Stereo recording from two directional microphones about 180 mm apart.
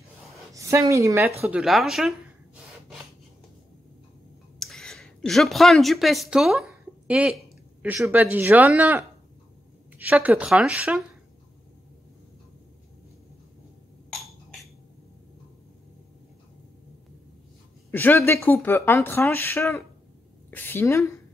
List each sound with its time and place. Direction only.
0.6 s a woman's voice: 15° right (ahead or behind)
1.4 s speech: 5° right (ahead or behind)
4.6 s speech: centre (ahead or behind)
17.9 s a woman's voice: 10° left (ahead or behind)